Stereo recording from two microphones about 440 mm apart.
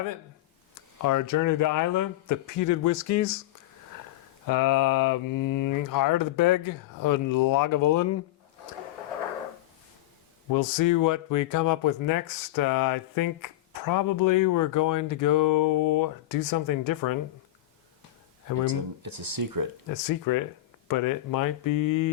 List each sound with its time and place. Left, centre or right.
1.0 s speech: left
4.4 s speech: left
10.5 s speech: left
18.6 s speech: right
19.9 s speech: left